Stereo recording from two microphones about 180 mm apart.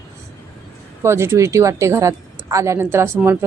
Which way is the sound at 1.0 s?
15° right (ahead or behind).